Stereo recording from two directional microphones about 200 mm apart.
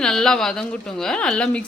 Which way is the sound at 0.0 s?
5° left (ahead or behind).